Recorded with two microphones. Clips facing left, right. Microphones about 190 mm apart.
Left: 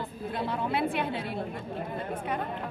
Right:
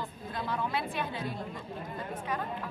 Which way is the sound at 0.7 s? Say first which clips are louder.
Left 5 dB; 60° left (ahead or behind).